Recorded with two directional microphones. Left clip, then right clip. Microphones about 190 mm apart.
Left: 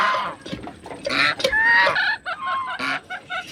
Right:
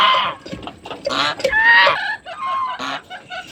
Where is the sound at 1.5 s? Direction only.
10° right (ahead or behind).